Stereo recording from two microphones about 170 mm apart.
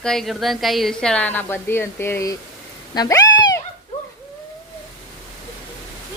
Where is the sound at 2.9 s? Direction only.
25° left (ahead or behind).